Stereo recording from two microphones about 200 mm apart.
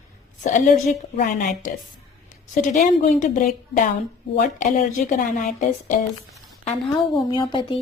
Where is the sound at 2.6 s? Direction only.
40° left (ahead or behind).